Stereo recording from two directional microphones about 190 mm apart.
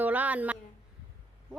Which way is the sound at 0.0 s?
10° right (ahead or behind).